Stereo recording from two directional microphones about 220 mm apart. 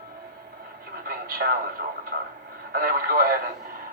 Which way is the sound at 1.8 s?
40° right (ahead or behind).